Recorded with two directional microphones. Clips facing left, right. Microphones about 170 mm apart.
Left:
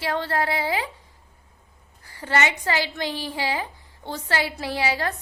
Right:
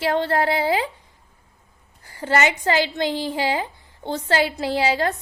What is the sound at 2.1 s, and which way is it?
A woman's voice, 30° right (ahead or behind).